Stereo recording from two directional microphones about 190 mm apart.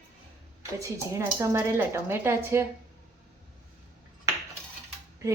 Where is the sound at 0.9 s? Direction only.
15° right (ahead or behind).